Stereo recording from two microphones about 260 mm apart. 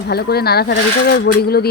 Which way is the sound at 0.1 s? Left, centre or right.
Left.